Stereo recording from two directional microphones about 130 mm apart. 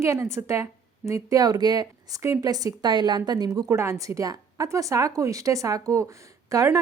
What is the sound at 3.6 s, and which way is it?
A woman's voice, 20° right (ahead or behind).